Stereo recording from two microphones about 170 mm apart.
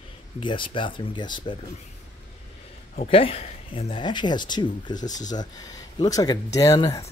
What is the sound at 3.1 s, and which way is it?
Speech, 35° left (ahead or behind).